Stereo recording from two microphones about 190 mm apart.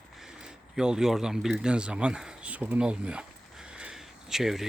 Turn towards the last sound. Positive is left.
turn(degrees=0)  # may be behind; listen again after turning